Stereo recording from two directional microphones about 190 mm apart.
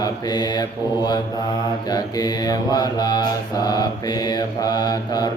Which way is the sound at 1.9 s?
20° left (ahead or behind).